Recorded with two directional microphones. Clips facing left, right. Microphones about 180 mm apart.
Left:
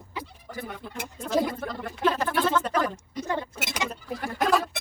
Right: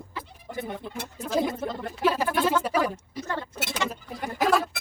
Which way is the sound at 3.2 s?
15° left (ahead or behind).